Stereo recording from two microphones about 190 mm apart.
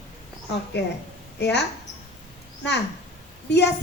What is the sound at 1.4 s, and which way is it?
Speech, 65° left (ahead or behind).